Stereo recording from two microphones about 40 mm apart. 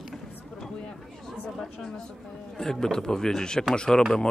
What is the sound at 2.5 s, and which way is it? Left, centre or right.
Speech, centre.